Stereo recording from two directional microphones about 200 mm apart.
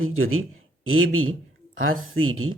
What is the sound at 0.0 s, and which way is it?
A man's voice, 90° right.